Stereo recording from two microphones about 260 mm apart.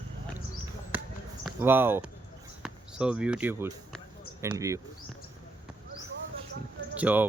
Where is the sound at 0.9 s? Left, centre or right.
Centre.